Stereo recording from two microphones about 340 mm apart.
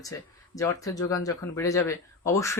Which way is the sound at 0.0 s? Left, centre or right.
Centre.